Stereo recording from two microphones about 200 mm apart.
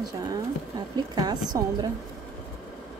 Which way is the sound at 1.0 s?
20° right (ahead or behind).